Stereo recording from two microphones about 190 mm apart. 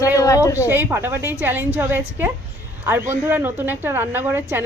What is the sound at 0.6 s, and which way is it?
Speech, 10° right (ahead or behind).